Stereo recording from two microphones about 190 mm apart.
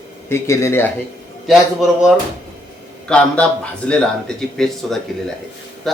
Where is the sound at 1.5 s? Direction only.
Centre (ahead or behind).